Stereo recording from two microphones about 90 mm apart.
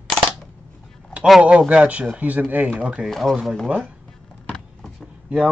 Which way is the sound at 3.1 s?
Centre (ahead or behind).